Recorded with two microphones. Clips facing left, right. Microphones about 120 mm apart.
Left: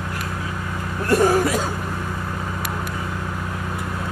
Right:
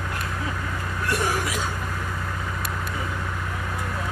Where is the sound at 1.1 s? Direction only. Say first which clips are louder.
Left 10 dB; 40° left (ahead or behind).